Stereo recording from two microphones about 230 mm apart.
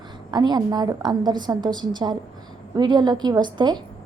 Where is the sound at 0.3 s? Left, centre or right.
Centre.